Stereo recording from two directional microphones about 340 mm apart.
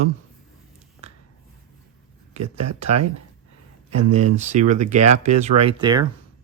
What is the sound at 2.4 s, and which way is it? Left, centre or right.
Speech, right.